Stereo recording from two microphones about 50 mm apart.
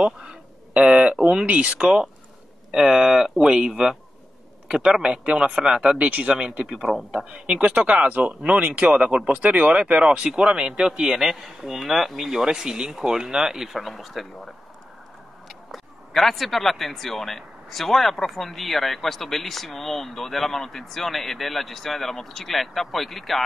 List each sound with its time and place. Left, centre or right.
0.7 s speech: right
1.8 s speech: centre
5.9 s speech: right
6.7 s speech: centre
7.2 s speech: right
11.2 s speech: centre